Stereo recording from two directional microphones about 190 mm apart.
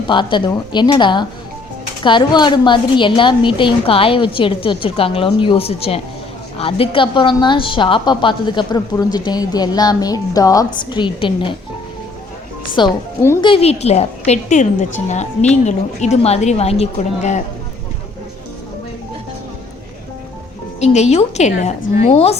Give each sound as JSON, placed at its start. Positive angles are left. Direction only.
{"t": 0.1, "sound": "a woman's voice", "side_deg": 25}
{"t": 12.8, "sound": "a woman's voice", "side_deg": 25}
{"t": 20.8, "sound": "a woman's voice", "side_deg": 35}